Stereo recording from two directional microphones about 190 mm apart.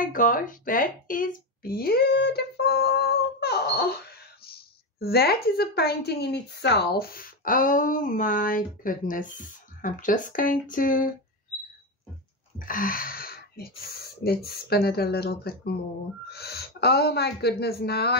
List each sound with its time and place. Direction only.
0.0 s speech: 45° left (ahead or behind)
12.5 s a sound: 45° left (ahead or behind)
14.4 s speech: 55° left (ahead or behind)